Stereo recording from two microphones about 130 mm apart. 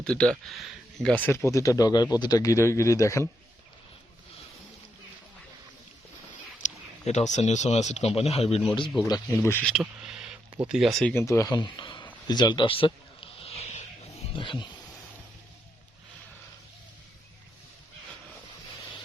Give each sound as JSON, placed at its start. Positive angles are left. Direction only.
{"t": 0.0, "sound": "speech", "side_deg": 5}
{"t": 6.6, "sound": "speech", "side_deg": 60}
{"t": 9.0, "sound": "speech", "side_deg": 25}
{"t": 9.8, "sound": "speech", "side_deg": -5}
{"t": 11.1, "sound": "a sound", "side_deg": 20}
{"t": 14.3, "sound": "speech", "side_deg": 40}